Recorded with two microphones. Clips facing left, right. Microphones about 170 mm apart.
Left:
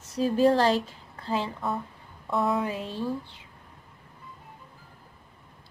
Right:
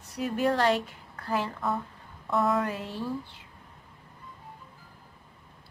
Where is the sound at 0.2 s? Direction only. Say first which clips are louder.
Left 5 dB; 30° left (ahead or behind).